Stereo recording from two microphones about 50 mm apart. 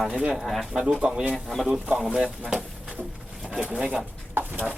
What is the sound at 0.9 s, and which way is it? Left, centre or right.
Speech, centre.